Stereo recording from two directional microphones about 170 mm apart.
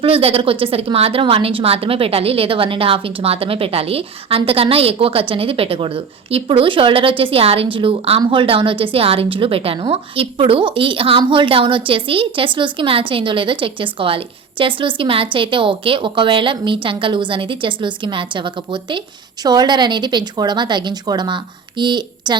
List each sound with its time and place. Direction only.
0.0 s a woman's voice: 35° right (ahead or behind)